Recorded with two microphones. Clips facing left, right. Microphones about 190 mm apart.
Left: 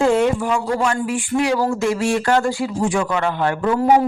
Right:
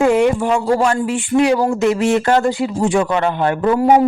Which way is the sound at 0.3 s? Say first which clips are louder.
Right 5 dB; 25° right (ahead or behind).